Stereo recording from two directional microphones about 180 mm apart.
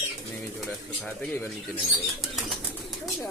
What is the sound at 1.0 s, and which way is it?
Speech, 10° left (ahead or behind).